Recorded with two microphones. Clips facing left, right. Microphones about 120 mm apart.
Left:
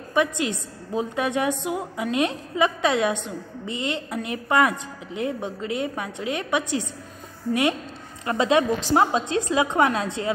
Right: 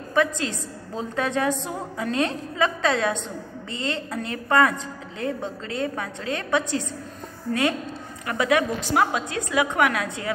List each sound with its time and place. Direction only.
0.1 s a woman's voice: 15° left (ahead or behind)
8.3 s a woman's voice: 25° left (ahead or behind)